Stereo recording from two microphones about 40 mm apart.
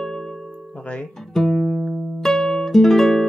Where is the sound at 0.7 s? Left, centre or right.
Left.